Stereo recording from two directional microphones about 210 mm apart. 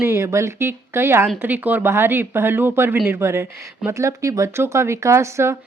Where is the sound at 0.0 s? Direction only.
15° right (ahead or behind).